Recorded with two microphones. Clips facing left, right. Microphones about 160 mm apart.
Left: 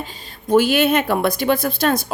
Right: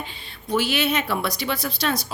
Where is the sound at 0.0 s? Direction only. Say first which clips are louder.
Left 4 dB; 40° left (ahead or behind).